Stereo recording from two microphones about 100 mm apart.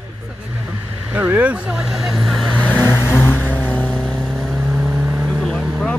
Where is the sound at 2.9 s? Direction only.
25° left (ahead or behind).